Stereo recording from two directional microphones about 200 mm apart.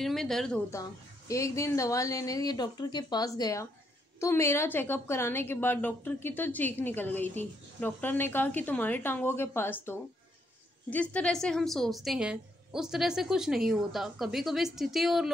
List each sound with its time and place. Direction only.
0.0 s a woman's voice: centre (ahead or behind)
0.7 s a woman's voice: 15° left (ahead or behind); by 15.3 s centre (ahead or behind)